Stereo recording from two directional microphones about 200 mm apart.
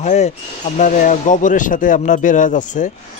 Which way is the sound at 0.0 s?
35° left (ahead or behind).